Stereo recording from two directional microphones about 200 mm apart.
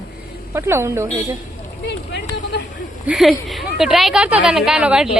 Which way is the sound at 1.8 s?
60° left (ahead or behind).